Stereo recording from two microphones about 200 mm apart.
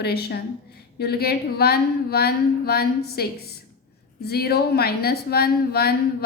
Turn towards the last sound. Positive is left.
turn(degrees=50)  # may be behind; listen again after turning